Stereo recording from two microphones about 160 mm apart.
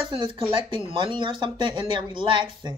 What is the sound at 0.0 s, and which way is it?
Speech, 30° right (ahead or behind).